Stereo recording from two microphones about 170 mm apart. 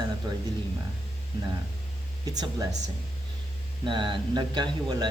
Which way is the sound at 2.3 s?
20° right (ahead or behind).